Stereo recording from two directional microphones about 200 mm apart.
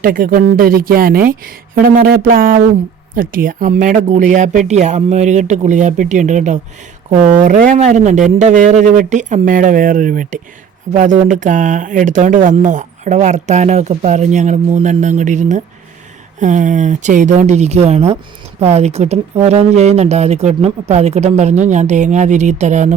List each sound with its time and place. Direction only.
0.0 s speech: 45° right (ahead or behind)